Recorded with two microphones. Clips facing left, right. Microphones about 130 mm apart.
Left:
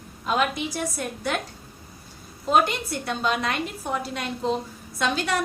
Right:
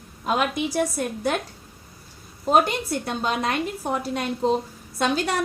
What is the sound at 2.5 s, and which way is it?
A woman's voice, 45° right (ahead or behind).